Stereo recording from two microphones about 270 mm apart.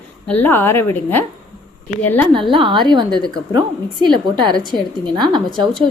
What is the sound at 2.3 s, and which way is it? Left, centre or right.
A woman's voice, centre.